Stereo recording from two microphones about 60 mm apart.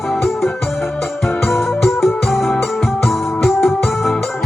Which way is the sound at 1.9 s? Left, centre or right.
Left.